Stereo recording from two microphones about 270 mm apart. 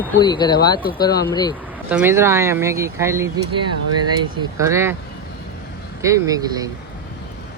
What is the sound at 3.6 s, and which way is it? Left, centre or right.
Speech, right.